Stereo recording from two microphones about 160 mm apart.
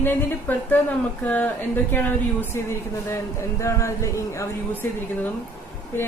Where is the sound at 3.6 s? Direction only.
20° left (ahead or behind).